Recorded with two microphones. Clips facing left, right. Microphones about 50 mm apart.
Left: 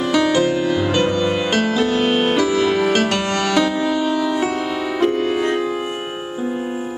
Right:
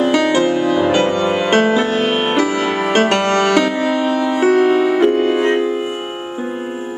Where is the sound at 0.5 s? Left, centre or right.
Right.